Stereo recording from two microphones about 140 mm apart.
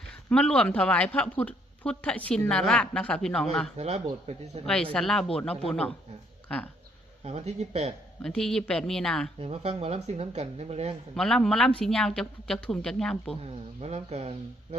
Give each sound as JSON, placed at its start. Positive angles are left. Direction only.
{"t": 0.1, "sound": "speech", "side_deg": 5}
{"t": 3.8, "sound": "speech", "side_deg": -50}
{"t": 4.6, "sound": "a woman's voice", "side_deg": 5}
{"t": 7.3, "sound": "speech", "side_deg": -50}
{"t": 8.2, "sound": "a woman's voice", "side_deg": 5}
{"t": 9.4, "sound": "speech", "side_deg": -45}
{"t": 11.1, "sound": "a woman's voice", "side_deg": 5}
{"t": 13.8, "sound": "speech", "side_deg": -50}